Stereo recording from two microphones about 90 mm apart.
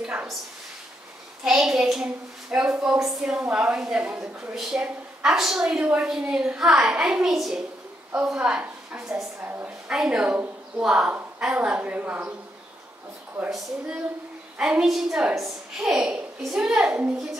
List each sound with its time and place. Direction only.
0.0 s a sound: 10° right (ahead or behind)
1.4 s a woman's voice: 5° right (ahead or behind)
9.4 s a woman's voice: 25° right (ahead or behind)
9.8 s a woman's voice: 10° right (ahead or behind)
13.5 s a woman's voice: centre (ahead or behind)